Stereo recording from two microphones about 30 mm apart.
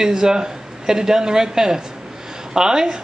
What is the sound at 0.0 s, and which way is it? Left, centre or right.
Speech, right.